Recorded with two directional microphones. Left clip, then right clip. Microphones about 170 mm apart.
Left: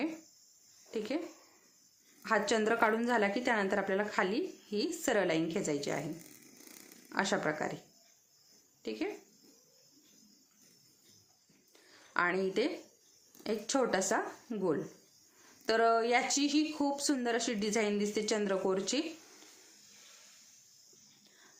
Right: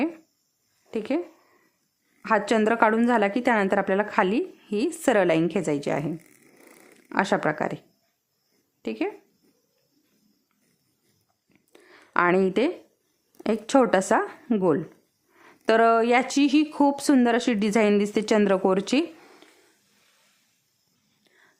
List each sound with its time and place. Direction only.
0.9 s speech: 55° right (ahead or behind)
2.2 s a woman's voice: 55° right (ahead or behind)
7.1 s a woman's voice: 55° right (ahead or behind)
8.8 s speech: 60° right (ahead or behind)
11.7 s a sound: 60° right (ahead or behind)
13.4 s a woman's voice: 60° right (ahead or behind)